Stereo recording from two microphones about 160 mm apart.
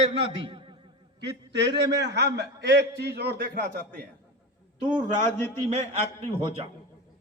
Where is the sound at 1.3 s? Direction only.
90° right; by 4.0 s 65° right (ahead or behind).